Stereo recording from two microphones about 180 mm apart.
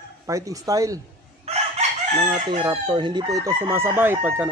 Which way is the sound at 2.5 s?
30° right (ahead or behind).